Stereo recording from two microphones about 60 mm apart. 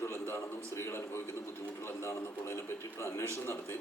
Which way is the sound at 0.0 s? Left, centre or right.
Left.